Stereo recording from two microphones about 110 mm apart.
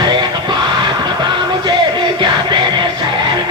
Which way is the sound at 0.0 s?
40° right (ahead or behind).